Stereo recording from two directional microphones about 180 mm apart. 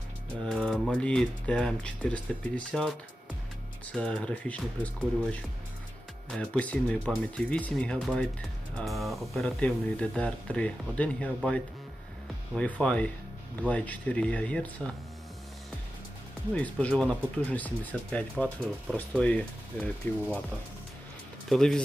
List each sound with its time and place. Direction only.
0.4 s speech: 5° left (ahead or behind)
3.9 s speech: 5° left (ahead or behind)
16.6 s speech: 10° left (ahead or behind)
20.0 s speech: 10° left (ahead or behind)
21.5 s speech: 5° left (ahead or behind)